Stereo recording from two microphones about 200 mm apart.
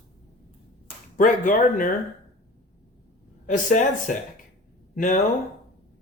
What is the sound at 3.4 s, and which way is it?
Speech, 40° left (ahead or behind).